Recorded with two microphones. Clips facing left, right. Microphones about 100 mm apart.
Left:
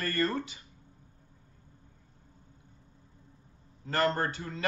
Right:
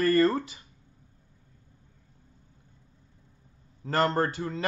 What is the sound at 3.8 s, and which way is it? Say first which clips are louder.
Speech: right 3 dB; 35° right (ahead or behind).